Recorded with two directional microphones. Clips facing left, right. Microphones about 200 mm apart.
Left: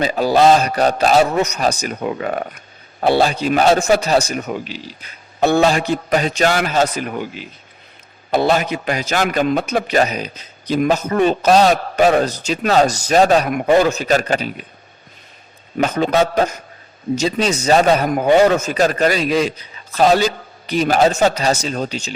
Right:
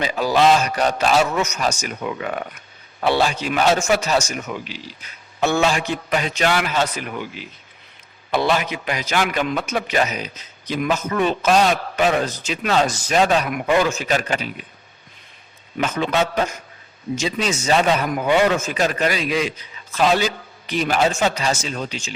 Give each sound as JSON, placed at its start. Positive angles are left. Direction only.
{"t": 0.0, "sound": "a man's voice", "side_deg": 40}
{"t": 15.8, "sound": "a man's voice", "side_deg": 40}